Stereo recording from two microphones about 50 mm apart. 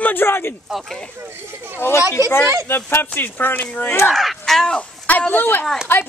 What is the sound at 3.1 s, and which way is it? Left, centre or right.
Speech, left.